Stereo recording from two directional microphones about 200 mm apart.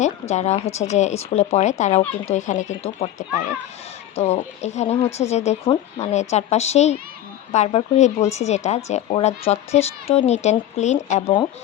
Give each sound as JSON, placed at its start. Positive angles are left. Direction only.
{"t": 0.0, "sound": "speech", "side_deg": 35}